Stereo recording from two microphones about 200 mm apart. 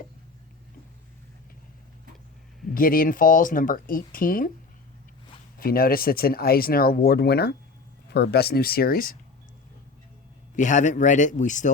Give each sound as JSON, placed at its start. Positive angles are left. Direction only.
{"t": 2.7, "sound": "speech", "side_deg": 45}
{"t": 5.5, "sound": "speech", "side_deg": 45}
{"t": 10.5, "sound": "speech", "side_deg": 40}